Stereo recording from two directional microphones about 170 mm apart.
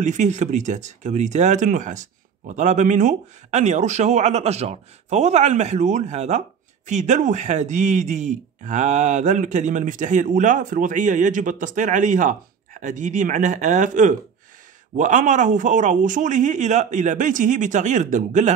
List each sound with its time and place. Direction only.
0.0 s speech: 45° right (ahead or behind)